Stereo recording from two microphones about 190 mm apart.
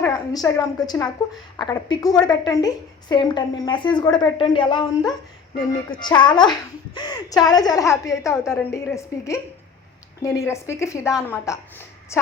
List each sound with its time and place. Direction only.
0.0 s a woman's voice: 15° left (ahead or behind)